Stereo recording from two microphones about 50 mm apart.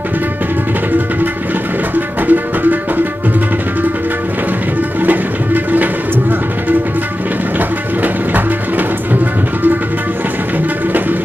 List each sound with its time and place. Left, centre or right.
2.0 s music: right
5.0 s music: right
7.5 s music: right